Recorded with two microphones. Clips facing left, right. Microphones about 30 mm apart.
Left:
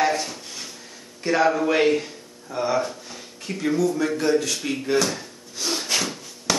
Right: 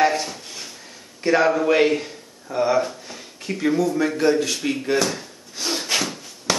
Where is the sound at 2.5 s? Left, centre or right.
Centre.